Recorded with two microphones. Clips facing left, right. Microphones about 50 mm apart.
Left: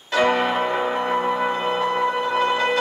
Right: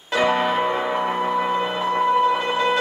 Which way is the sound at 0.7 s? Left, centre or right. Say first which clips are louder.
Even; centre.